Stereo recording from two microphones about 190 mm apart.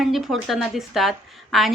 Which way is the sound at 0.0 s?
Centre (ahead or behind).